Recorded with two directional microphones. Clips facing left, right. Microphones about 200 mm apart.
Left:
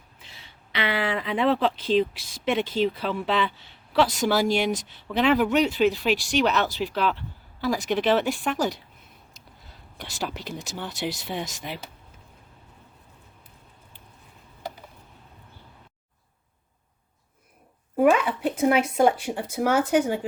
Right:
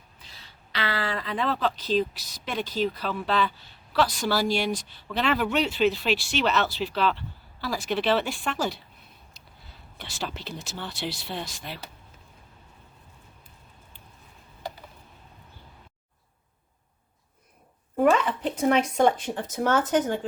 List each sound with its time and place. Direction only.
0.7 s speech: 20° left (ahead or behind)
5.3 s speech: centre (ahead or behind)
5.5 s speech: 15° left (ahead or behind)
10.0 s speech: 10° left (ahead or behind)
17.9 s speech: 10° left (ahead or behind)